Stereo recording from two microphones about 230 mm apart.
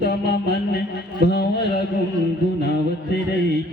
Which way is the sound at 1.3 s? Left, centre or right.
Left.